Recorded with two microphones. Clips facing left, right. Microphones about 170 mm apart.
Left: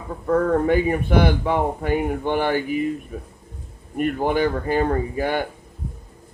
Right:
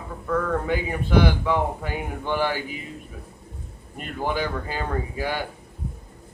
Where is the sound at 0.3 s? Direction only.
55° left (ahead or behind).